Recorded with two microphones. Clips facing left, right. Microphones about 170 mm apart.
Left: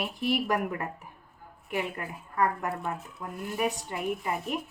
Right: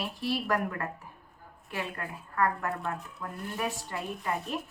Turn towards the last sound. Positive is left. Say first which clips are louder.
# left 3 dB
turn(degrees=15)  # may be behind; listen again after turning